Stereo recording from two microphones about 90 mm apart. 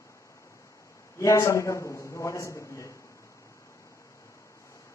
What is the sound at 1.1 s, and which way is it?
A man's voice, 35° left (ahead or behind).